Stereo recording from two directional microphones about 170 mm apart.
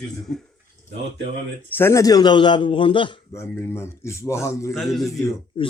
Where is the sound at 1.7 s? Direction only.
15° left (ahead or behind); by 3.1 s 30° left (ahead or behind).